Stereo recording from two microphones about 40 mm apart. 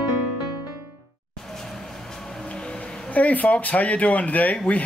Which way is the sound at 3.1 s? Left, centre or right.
Left.